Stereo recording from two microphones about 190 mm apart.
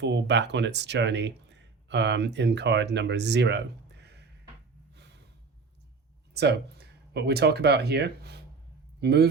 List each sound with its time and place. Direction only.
0.0 s speech: 65° right (ahead or behind)
6.3 s speech: 60° right (ahead or behind)